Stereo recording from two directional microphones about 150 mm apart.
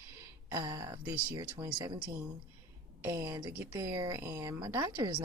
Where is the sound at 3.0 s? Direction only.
15° right (ahead or behind).